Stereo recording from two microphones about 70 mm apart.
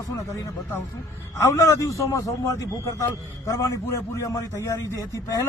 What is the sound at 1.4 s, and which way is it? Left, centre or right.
A man's voice, left.